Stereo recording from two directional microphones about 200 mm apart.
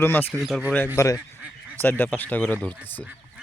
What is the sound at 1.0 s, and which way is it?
Speech, 15° left (ahead or behind).